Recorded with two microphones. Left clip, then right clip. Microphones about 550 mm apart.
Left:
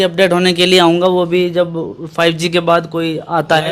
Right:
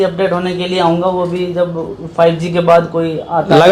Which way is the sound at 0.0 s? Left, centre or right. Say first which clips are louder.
Left 2 dB; left.